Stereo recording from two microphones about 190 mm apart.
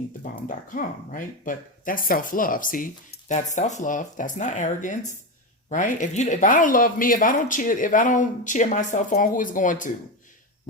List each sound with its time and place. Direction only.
0.2 s speech: 45° left (ahead or behind)